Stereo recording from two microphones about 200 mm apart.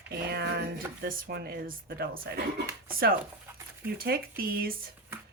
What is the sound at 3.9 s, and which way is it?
Speech, 50° right (ahead or behind).